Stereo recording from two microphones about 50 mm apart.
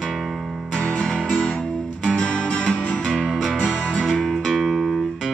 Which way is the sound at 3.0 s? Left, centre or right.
Centre.